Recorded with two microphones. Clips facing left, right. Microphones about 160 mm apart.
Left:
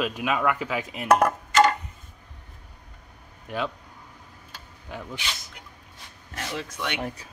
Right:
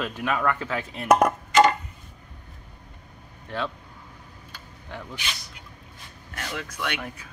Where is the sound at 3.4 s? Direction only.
15° left (ahead or behind).